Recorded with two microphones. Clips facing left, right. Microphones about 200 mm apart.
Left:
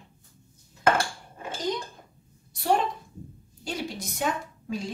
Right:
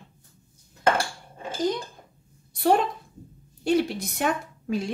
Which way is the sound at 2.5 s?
60° right (ahead or behind).